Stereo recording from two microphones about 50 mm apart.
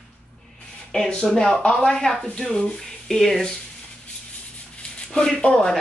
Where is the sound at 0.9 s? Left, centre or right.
Centre.